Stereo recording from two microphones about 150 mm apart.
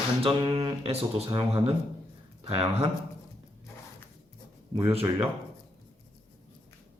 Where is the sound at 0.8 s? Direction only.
40° right (ahead or behind).